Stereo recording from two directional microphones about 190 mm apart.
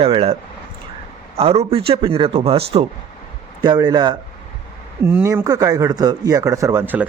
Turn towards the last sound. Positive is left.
turn(degrees=-10)  # may be behind; listen again after turning